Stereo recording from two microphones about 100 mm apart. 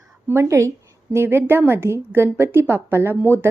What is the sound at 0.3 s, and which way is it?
Speech, 30° right (ahead or behind).